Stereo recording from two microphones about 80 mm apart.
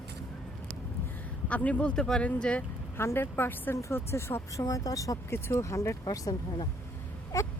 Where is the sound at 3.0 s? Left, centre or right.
Left.